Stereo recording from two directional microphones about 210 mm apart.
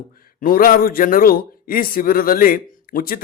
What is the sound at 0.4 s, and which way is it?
A man's voice, 40° left (ahead or behind).